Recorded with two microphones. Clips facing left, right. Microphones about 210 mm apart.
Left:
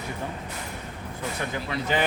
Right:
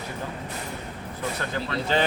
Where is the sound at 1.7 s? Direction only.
15° left (ahead or behind).